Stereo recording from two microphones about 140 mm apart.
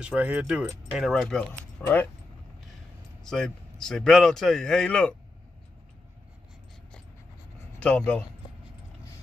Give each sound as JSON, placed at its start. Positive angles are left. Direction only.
{"t": 0.0, "sound": "speech", "side_deg": -10}
{"t": 3.3, "sound": "a man's voice", "side_deg": 5}
{"t": 7.8, "sound": "speech", "side_deg": 10}